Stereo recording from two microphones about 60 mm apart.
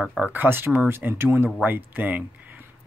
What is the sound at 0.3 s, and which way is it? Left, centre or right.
Speech, right.